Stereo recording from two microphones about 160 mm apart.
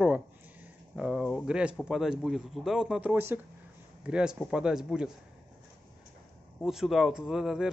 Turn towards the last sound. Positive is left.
turn(degrees=-5)  # may be behind; listen again after turning